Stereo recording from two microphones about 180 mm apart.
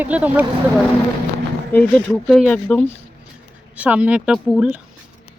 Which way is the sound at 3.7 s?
10° right (ahead or behind).